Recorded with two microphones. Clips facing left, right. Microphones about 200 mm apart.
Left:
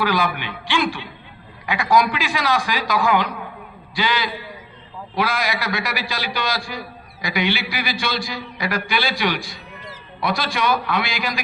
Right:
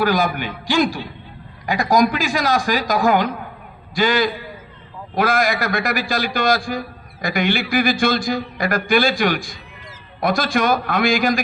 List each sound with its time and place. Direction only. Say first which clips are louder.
0.0 s a man's voice: right 3 dB; 45° right (ahead or behind)